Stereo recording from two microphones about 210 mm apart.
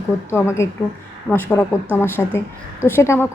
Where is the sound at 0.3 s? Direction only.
10° left (ahead or behind).